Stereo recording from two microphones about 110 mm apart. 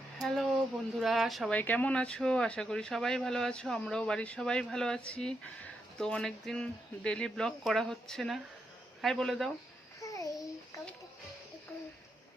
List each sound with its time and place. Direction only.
0.2 s speech: centre (ahead or behind)
1.5 s speech: 15° left (ahead or behind)
10.0 s babbling: 30° left (ahead or behind)